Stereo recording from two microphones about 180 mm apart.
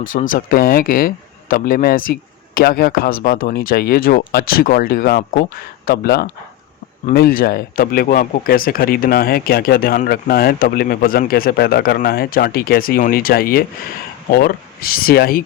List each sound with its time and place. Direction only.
0.0 s speech: 45° left (ahead or behind)